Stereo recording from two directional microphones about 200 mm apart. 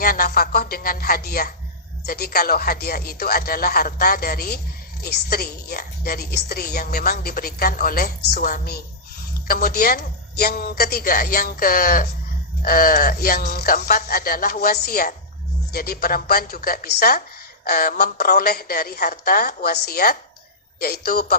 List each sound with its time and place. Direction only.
0.0 s a woman's voice: 45° left (ahead or behind)